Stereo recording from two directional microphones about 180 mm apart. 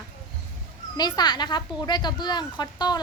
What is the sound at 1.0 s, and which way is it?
A woman's voice, 25° left (ahead or behind).